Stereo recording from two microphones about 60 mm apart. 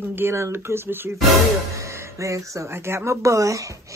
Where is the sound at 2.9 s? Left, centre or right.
Right.